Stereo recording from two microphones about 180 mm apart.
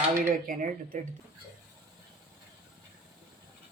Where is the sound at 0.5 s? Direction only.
55° right (ahead or behind).